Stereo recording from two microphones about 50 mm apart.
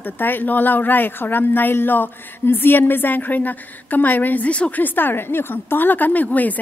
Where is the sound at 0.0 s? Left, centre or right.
Left.